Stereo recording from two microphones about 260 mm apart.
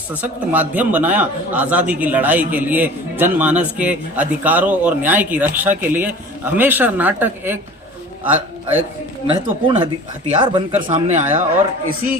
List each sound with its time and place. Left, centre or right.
0.1 s a man's voice: centre
9.3 s speech: centre